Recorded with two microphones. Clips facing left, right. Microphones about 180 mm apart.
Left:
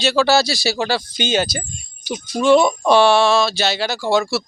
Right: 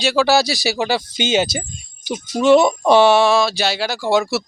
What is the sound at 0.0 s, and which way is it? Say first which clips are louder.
Speech: even; 10° right (ahead or behind).